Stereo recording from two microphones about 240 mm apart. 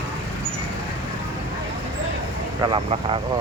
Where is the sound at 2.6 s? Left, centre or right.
Right.